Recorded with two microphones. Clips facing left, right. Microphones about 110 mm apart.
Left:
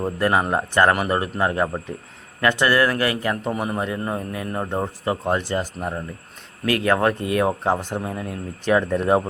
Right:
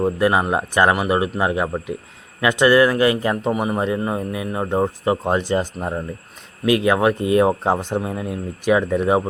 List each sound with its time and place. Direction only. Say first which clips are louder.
0.0 s a man's voice: right 3 dB; 10° right (ahead or behind)